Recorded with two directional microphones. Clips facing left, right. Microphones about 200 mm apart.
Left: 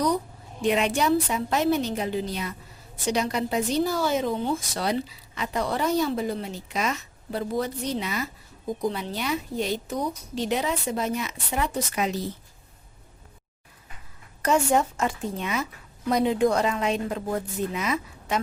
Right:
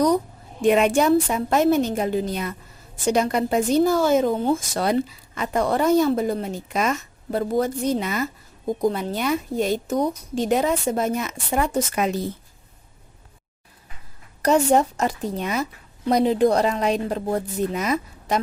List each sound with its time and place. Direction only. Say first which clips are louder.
0.6 s a woman's voice: right 6 dB; 50° right (ahead or behind)
14.4 s speech: right 4 dB; 40° right (ahead or behind)